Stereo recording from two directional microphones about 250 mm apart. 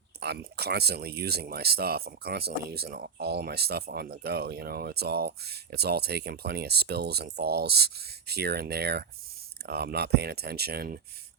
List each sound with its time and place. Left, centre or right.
0.2 s speech: right